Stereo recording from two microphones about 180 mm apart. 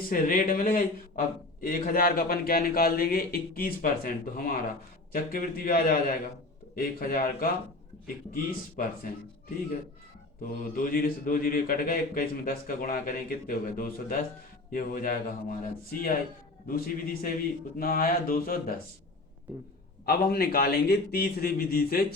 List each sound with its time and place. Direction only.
0.1 s a man's voice: 50° left (ahead or behind)
10.4 s a man's voice: 50° left (ahead or behind)
20.1 s a man's voice: 60° left (ahead or behind)